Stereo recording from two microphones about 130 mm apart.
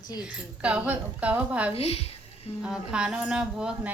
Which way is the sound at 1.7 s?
50° left (ahead or behind).